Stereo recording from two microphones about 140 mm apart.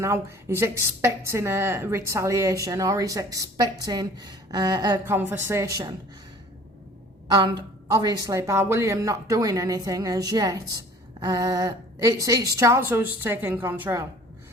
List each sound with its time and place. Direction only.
0.0 s a woman's voice: 20° right (ahead or behind)
5.0 s a woman's voice: 15° right (ahead or behind)
7.3 s a woman's voice: 30° right (ahead or behind); by 14.0 s 15° right (ahead or behind)